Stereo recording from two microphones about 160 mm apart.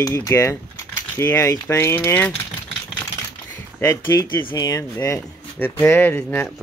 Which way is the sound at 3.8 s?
15° left (ahead or behind).